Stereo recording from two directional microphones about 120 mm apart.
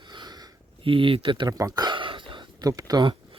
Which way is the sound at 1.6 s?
30° right (ahead or behind).